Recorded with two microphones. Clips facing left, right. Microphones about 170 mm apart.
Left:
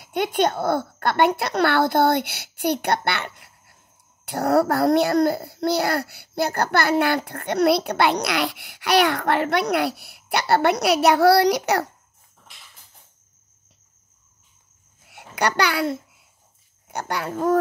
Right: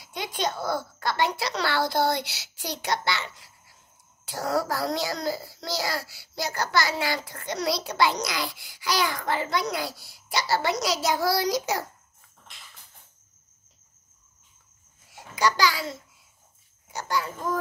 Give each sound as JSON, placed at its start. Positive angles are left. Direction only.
{"t": 0.0, "sound": "a child's voice", "side_deg": 55}
{"t": 15.0, "sound": "a child's voice", "side_deg": 65}